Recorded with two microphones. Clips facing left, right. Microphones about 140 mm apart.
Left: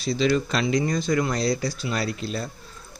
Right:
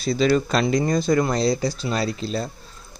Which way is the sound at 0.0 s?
40° right (ahead or behind).